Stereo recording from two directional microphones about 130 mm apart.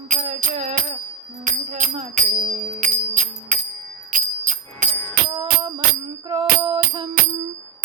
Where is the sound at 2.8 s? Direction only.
80° right.